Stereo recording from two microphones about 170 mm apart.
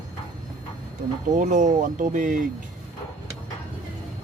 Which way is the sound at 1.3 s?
50° right (ahead or behind).